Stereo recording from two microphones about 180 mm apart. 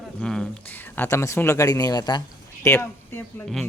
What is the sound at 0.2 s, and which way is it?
Speech, 5° left (ahead or behind).